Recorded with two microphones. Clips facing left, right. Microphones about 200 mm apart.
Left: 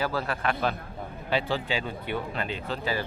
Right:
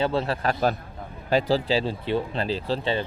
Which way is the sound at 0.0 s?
25° right (ahead or behind).